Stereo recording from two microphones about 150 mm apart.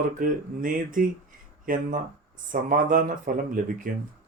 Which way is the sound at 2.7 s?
65° right (ahead or behind).